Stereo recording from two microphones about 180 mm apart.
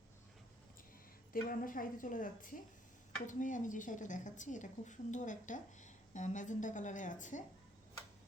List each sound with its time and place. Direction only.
1.3 s a woman's voice: 50° left (ahead or behind)